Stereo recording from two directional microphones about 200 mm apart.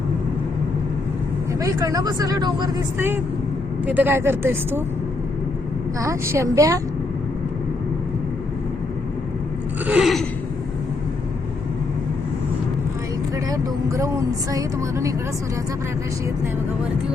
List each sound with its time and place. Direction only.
1.5 s speech: 15° right (ahead or behind)
6.0 s speech: 15° right (ahead or behind)
9.8 s a sound: 5° right (ahead or behind)
13.5 s speech: 15° right (ahead or behind)